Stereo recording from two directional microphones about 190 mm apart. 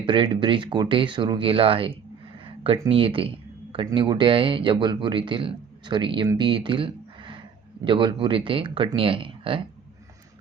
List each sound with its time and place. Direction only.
0.0 s speech: 25° right (ahead or behind)
2.9 s speech: 30° right (ahead or behind)